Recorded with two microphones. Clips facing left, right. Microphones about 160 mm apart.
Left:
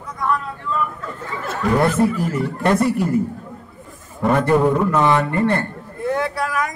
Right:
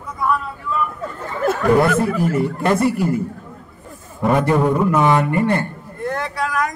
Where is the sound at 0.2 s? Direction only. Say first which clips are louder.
Right 1 dB; 5° right (ahead or behind).